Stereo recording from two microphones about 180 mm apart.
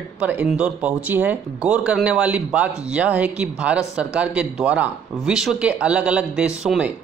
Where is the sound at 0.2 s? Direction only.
10° right (ahead or behind).